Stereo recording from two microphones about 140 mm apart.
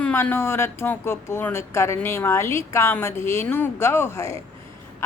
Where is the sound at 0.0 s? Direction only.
15° left (ahead or behind).